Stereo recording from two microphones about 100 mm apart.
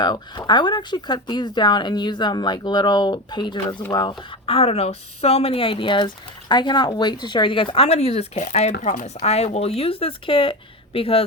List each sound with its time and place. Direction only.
0.0 s speech: 50° left (ahead or behind)
4.4 s speech: 80° left